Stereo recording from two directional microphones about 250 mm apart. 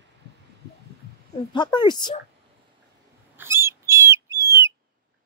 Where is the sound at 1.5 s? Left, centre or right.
Centre.